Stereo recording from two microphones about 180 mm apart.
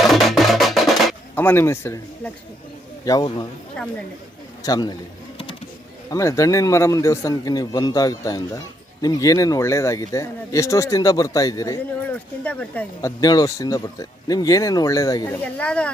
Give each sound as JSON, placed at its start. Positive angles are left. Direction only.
{"t": 0.0, "sound": "music", "side_deg": 0}
{"t": 1.4, "sound": "a man's voice", "side_deg": 10}
{"t": 4.6, "sound": "a man's voice", "side_deg": 20}
{"t": 6.1, "sound": "a man's voice", "side_deg": 15}
{"t": 12.5, "sound": "a man's voice", "side_deg": 10}
{"t": 15.5, "sound": "speech", "side_deg": 5}